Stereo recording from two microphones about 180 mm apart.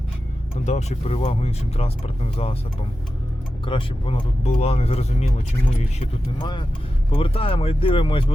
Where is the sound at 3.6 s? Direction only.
30° left (ahead or behind).